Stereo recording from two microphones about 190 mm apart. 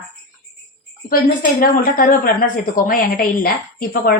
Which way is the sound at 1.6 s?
45° left (ahead or behind).